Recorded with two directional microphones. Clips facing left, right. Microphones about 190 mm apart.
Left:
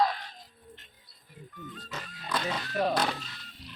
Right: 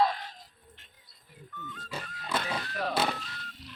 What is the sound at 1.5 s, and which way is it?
Music, 35° left (ahead or behind).